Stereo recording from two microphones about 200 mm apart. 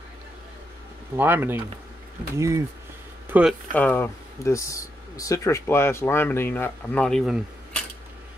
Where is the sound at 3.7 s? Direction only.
10° left (ahead or behind).